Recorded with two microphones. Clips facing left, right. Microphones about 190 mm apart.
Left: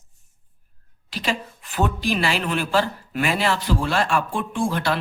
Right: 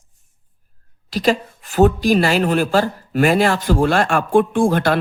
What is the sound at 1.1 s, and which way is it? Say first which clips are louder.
A woman's voice: right 9 dB; 40° right (ahead or behind).